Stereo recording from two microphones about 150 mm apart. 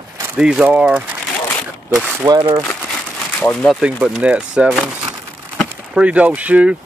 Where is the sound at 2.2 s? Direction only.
25° right (ahead or behind).